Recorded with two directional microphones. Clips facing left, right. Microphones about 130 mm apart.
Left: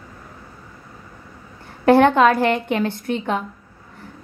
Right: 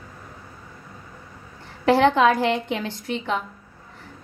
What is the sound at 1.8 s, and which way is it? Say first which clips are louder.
A woman's voice: left 4 dB; 55° left (ahead or behind).